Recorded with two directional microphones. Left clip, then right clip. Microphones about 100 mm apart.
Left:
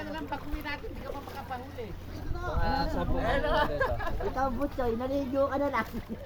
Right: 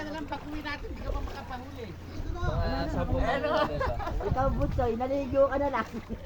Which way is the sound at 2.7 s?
40° left (ahead or behind).